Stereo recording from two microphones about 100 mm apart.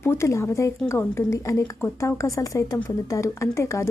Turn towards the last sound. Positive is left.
turn(degrees=25)  # may be behind; listen again after turning